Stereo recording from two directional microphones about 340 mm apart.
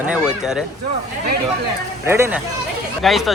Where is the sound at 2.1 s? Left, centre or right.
Centre.